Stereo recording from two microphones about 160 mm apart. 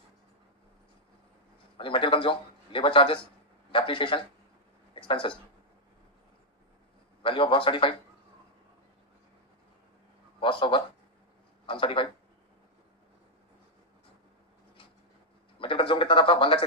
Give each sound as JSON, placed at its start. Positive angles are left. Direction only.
{"t": 1.8, "sound": "a man's voice", "side_deg": 30}
{"t": 7.2, "sound": "a man's voice", "side_deg": 35}
{"t": 10.4, "sound": "a man's voice", "side_deg": 30}
{"t": 15.5, "sound": "a man's voice", "side_deg": 35}